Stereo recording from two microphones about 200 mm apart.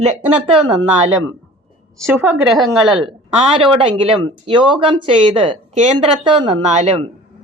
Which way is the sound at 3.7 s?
25° right (ahead or behind).